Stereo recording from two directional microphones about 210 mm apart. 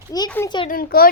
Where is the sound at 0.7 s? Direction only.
45° left (ahead or behind).